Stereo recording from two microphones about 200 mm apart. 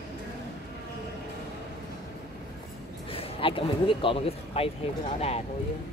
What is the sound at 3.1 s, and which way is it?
Speech, 25° left (ahead or behind).